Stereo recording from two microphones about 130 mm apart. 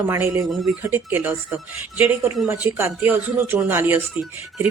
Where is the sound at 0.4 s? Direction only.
Centre (ahead or behind).